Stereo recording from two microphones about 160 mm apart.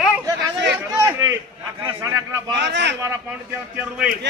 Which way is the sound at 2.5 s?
90° right.